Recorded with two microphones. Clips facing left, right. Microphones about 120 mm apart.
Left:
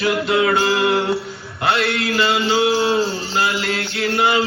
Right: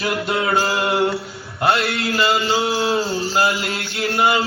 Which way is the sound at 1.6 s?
Centre (ahead or behind).